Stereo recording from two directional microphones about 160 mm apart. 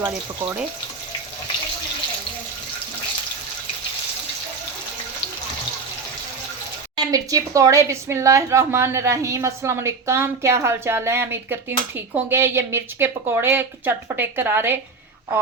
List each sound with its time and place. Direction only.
6.9 s a woman's voice: 20° right (ahead or behind)